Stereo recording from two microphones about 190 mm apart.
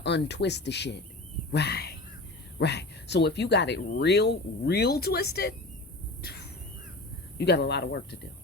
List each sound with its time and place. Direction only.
0.0 s speech: 65° left (ahead or behind)
6.2 s a sound: 60° left (ahead or behind)
7.3 s speech: 60° left (ahead or behind)